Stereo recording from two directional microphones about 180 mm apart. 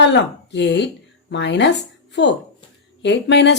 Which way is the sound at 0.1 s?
80° left.